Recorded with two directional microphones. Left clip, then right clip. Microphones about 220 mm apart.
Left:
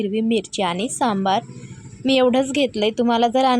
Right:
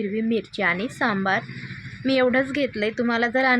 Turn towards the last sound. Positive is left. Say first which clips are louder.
# left 3 dB
turn(degrees=25)  # may be behind; listen again after turning